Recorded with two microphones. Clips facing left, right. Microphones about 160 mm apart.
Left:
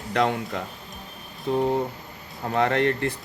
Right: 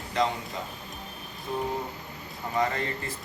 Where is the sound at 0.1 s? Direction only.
65° left (ahead or behind).